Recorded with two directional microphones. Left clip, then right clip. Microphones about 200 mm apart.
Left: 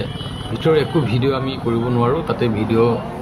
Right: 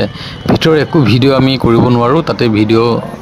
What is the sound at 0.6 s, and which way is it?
A man's voice, 55° right (ahead or behind).